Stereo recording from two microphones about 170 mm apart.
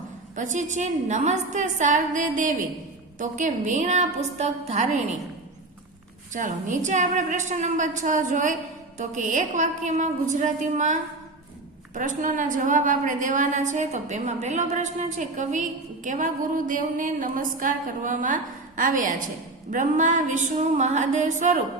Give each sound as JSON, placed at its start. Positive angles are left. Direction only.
{"t": 0.3, "sound": "a woman's voice", "side_deg": -45}
{"t": 6.3, "sound": "a woman's voice", "side_deg": -45}